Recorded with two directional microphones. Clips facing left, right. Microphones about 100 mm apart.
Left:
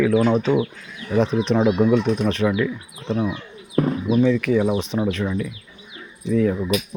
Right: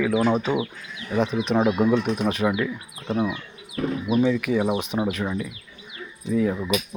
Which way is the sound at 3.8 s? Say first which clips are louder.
Left 6 dB; 40° left (ahead or behind).